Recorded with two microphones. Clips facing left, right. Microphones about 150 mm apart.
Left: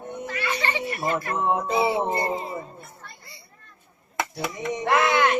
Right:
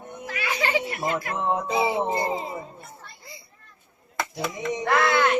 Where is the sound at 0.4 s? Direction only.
90° right.